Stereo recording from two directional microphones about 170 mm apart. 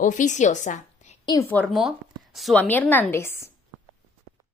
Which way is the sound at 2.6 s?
10° left (ahead or behind).